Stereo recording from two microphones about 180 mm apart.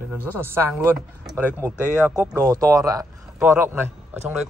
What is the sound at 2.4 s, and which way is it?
Speech, 20° right (ahead or behind).